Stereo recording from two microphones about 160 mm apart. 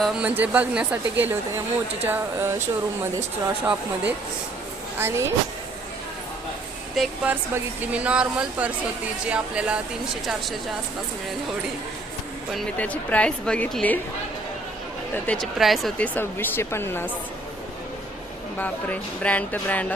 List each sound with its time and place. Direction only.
0.0 s speech: 10° right (ahead or behind)
6.9 s speech: 5° right (ahead or behind)
12.5 s speech: 10° left (ahead or behind)
15.3 s speech: centre (ahead or behind)
16.1 s speech: 15° left (ahead or behind)
18.6 s speech: 10° left (ahead or behind)